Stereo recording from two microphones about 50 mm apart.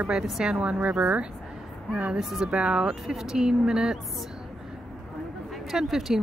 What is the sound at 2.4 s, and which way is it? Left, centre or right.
Speech, centre.